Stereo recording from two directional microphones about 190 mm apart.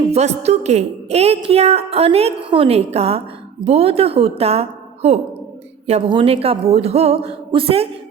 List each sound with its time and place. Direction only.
0.1 s a woman's voice: 35° right (ahead or behind)
5.8 s a woman's voice: 30° right (ahead or behind)